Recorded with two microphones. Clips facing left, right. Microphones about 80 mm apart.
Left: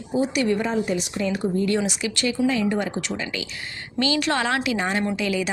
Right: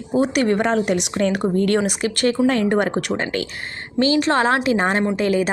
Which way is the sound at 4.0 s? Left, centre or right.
Right.